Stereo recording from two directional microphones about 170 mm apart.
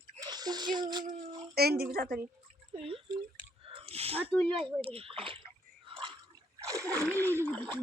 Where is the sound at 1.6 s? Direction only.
65° right (ahead or behind).